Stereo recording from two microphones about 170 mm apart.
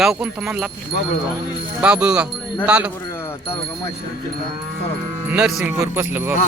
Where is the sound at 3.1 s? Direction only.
15° left (ahead or behind).